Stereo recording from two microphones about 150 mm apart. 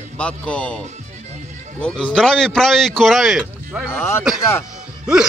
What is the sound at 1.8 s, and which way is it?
A man's voice, 5° left (ahead or behind).